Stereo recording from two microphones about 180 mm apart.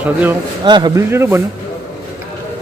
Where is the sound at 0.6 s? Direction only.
25° right (ahead or behind).